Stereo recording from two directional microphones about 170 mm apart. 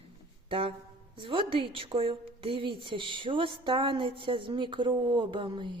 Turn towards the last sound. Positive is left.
turn(degrees=-30)  # may be behind; listen again after turning